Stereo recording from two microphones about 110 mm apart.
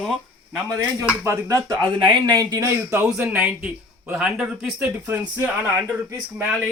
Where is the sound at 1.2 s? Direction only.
25° right (ahead or behind).